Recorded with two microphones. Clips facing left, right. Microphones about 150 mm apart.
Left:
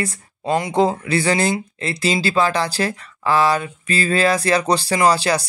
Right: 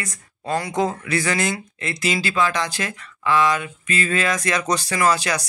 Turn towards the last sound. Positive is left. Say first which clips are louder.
# left 4 dB
turn(degrees=30)  # may be behind; listen again after turning